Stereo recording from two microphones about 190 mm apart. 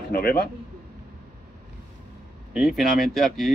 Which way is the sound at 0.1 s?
55° left (ahead or behind).